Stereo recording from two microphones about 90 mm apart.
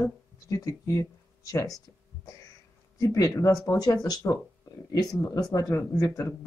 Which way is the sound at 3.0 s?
40° left (ahead or behind).